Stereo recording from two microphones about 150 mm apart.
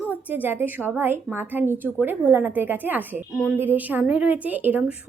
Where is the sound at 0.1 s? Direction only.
10° right (ahead or behind).